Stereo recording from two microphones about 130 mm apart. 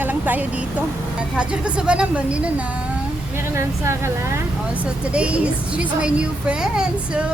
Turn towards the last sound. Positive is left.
turn(degrees=-5)  # may be behind; listen again after turning